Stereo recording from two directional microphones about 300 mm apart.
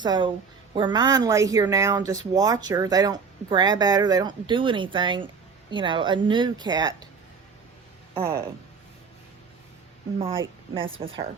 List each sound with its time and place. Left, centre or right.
0.0 s speech: centre
8.1 s speech: centre
10.2 s speech: centre